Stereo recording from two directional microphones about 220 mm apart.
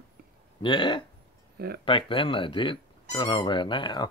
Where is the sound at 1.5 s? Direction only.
45° right (ahead or behind).